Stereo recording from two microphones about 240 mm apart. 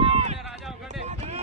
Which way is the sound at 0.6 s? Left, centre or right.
Centre.